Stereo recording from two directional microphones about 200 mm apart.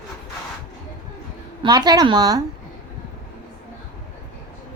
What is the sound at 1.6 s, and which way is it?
Speech, 20° right (ahead or behind).